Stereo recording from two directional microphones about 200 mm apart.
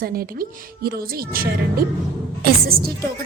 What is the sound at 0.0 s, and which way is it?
A woman's voice, 45° right (ahead or behind).